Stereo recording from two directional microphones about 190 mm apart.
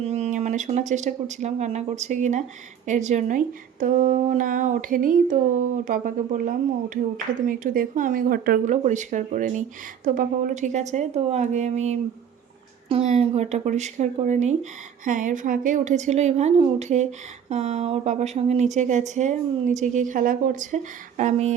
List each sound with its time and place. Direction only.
0.0 s speech: 35° right (ahead or behind)